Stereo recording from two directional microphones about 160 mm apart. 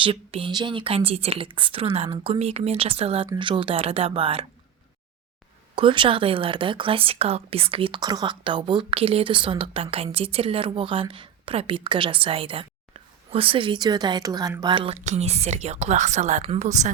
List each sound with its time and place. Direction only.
0.0 s speech: 35° right (ahead or behind)
5.7 s speech: 30° right (ahead or behind)
15.0 s speech: 45° right (ahead or behind)